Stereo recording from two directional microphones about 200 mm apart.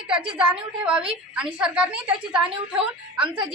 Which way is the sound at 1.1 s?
5° right (ahead or behind).